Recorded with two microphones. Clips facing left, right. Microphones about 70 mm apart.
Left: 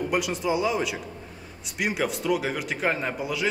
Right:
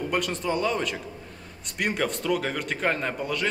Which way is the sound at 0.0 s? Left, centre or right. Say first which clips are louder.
Left 1 dB; centre.